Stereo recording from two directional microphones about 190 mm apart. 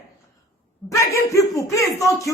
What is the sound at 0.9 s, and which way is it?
A woman's voice, 15° left (ahead or behind).